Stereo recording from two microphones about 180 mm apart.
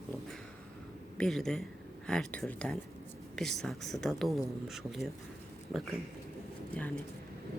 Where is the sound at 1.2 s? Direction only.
5° left (ahead or behind).